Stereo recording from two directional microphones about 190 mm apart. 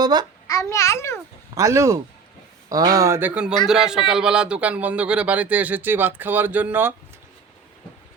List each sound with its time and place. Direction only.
0.0 s a child's voice: 20° right (ahead or behind)
0.4 s a child's voice: 15° left (ahead or behind)
1.5 s a man's voice: 15° right (ahead or behind)